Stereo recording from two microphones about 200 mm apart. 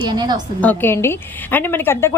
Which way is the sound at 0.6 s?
10° left (ahead or behind).